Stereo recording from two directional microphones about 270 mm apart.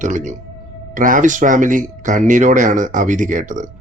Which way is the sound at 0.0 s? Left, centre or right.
Right.